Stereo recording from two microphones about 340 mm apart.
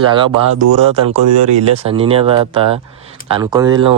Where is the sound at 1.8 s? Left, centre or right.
Centre.